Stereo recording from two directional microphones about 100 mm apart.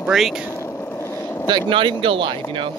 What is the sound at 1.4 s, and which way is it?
Speech, 50° right (ahead or behind).